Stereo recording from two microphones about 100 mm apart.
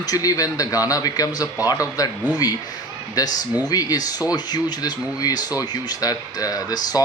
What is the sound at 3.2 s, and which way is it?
Speech, 40° left (ahead or behind).